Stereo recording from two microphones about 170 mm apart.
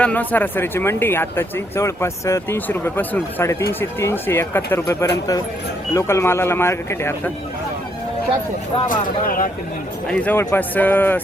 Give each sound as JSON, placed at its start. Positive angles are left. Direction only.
{"t": 0.0, "sound": "speech", "side_deg": 10}
{"t": 9.2, "sound": "speech", "side_deg": 55}
{"t": 10.1, "sound": "speech", "side_deg": 10}